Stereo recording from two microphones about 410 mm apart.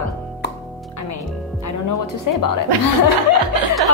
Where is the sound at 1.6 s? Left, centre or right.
Left.